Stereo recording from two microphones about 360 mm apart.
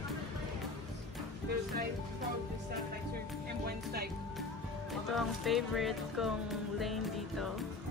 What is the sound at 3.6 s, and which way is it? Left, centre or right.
Speech, right.